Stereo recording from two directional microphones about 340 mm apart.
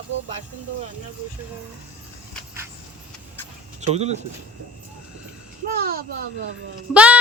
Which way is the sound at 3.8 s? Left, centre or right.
Centre.